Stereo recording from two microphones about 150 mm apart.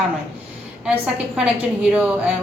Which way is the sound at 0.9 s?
10° right (ahead or behind).